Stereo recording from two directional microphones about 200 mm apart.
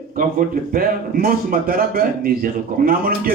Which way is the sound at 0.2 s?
45° right (ahead or behind).